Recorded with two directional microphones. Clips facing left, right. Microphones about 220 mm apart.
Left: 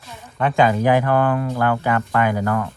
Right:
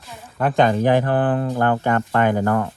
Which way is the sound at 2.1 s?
35° right (ahead or behind).